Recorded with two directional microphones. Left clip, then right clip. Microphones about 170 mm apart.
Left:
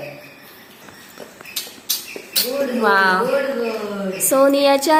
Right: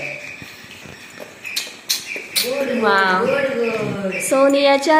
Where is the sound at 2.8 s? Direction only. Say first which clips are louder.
Left 1 dB; centre (ahead or behind).